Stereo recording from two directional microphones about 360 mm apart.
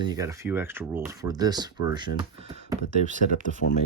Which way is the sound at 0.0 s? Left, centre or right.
Centre.